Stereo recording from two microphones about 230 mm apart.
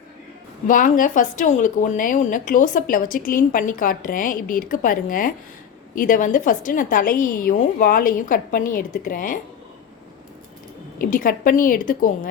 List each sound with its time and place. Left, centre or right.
0.7 s speech: left
10.9 s speech: left